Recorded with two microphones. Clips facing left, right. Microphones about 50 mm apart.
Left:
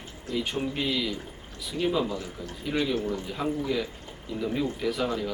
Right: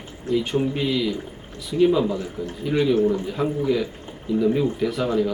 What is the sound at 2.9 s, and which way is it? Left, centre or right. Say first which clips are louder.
Speech: right 9 dB; right.